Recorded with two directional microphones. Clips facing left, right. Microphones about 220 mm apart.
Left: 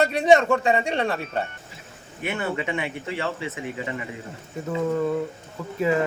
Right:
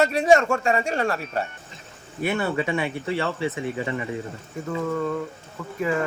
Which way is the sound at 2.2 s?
35° right (ahead or behind).